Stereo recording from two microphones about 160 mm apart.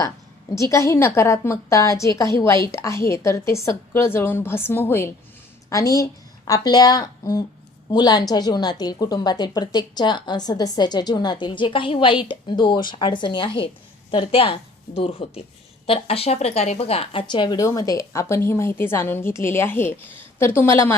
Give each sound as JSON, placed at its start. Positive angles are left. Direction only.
{"t": 0.5, "sound": "a woman's voice", "side_deg": 20}